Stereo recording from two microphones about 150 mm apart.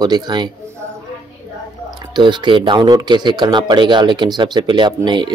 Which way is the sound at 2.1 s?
30° right (ahead or behind).